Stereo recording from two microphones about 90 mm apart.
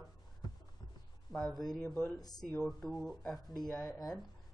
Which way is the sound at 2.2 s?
45° left (ahead or behind).